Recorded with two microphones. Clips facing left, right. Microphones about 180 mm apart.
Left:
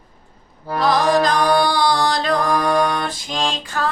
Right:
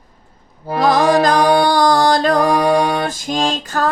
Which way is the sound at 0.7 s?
45° right (ahead or behind).